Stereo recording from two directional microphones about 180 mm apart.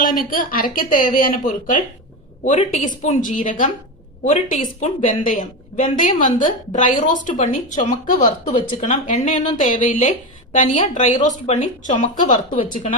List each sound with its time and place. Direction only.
0.0 s a woman's voice: 50° left (ahead or behind)